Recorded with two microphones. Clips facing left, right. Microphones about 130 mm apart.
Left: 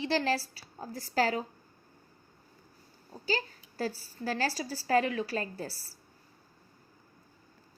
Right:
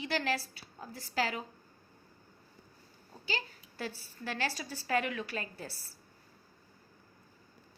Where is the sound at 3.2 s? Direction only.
40° left (ahead or behind).